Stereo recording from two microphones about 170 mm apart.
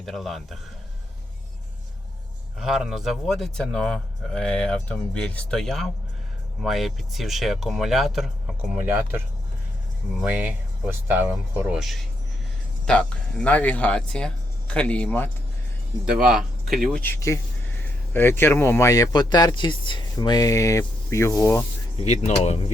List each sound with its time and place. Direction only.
0.0 s speech: centre (ahead or behind)
2.6 s speech: centre (ahead or behind)
10.2 s speech: 10° right (ahead or behind); by 15.3 s 10° left (ahead or behind)
16.0 s speech: 5° right (ahead or behind)
17.0 s speech: 15° left (ahead or behind)
21.9 s speech: 40° left (ahead or behind)